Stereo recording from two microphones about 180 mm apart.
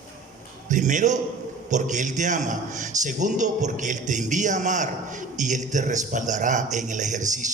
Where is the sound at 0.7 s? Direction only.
45° right (ahead or behind).